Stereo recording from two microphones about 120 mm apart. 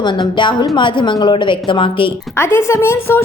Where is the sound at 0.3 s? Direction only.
40° left (ahead or behind).